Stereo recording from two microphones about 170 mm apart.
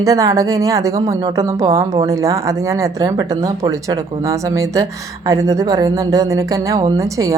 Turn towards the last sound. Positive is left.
turn(degrees=-20)  # may be behind; listen again after turning